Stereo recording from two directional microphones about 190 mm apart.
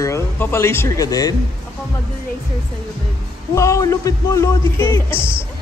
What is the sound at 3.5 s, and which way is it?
A man's voice, 15° left (ahead or behind).